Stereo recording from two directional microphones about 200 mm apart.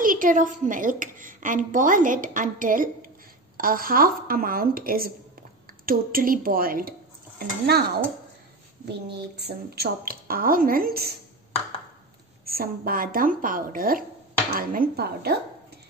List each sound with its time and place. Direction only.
0.0 s a woman's voice: 40° right (ahead or behind)
9.4 s a woman's voice: 55° right (ahead or behind)
12.4 s a woman's voice: 50° right (ahead or behind)